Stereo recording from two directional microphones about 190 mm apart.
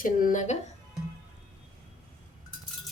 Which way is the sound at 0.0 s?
45° left (ahead or behind).